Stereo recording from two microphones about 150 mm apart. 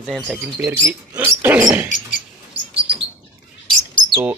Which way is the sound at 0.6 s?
15° right (ahead or behind).